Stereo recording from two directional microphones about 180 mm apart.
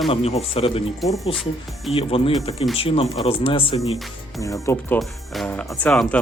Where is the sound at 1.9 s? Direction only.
30° left (ahead or behind).